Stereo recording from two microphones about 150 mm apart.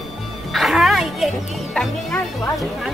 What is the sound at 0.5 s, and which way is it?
A child's voice, centre (ahead or behind).